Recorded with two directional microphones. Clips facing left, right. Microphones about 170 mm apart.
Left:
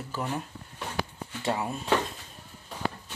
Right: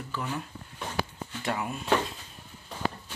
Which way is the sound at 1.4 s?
30° left (ahead or behind).